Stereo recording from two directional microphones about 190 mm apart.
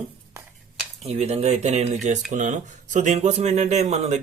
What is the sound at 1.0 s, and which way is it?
Speech, 35° right (ahead or behind).